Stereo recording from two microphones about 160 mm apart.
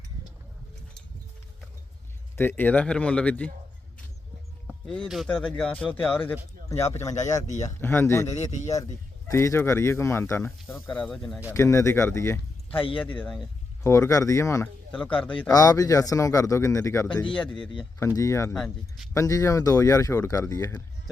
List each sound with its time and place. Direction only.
2.3 s speech: 10° left (ahead or behind)
4.9 s speech: centre (ahead or behind); by 7.1 s 15° left (ahead or behind)
7.4 s speech: 50° left (ahead or behind)
7.8 s speech: 15° left (ahead or behind)
9.3 s speech: 15° left (ahead or behind)
11.5 s speech: 20° left (ahead or behind)
12.7 s speech: 35° left (ahead or behind)
13.1 s speech: centre (ahead or behind)
13.8 s speech: 20° left (ahead or behind)
14.9 s speech: 5° left (ahead or behind)
15.4 s speech: 25° left (ahead or behind)
18.5 s speech: centre (ahead or behind)
19.1 s speech: 20° left (ahead or behind)